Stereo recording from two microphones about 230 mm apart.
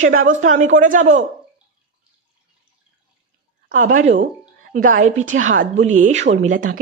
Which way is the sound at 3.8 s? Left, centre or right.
Right.